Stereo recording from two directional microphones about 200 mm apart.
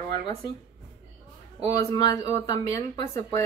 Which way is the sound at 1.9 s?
15° left (ahead or behind).